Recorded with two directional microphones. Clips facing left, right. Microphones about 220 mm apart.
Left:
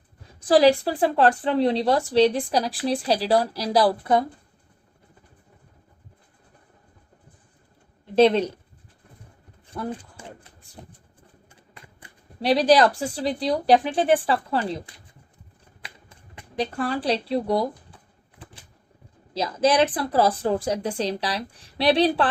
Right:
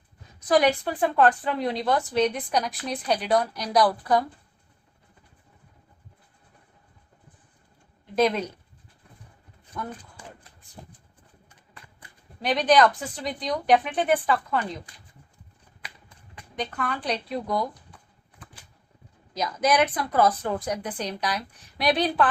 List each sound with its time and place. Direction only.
0.4 s speech: 30° left (ahead or behind)
8.1 s speech: 30° left (ahead or behind)
9.7 s speech: 30° left (ahead or behind)
11.9 s speech: 30° left (ahead or behind)
15.8 s a sound: 25° left (ahead or behind)
19.3 s speech: 30° left (ahead or behind)